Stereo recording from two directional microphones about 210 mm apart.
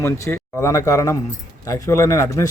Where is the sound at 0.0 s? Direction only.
15° left (ahead or behind).